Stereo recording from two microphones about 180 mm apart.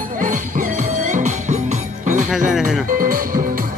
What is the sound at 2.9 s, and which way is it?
Music, 50° right (ahead or behind).